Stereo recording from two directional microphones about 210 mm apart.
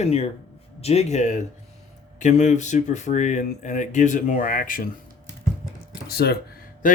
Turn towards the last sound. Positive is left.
turn(degrees=50)  # may be behind; listen again after turning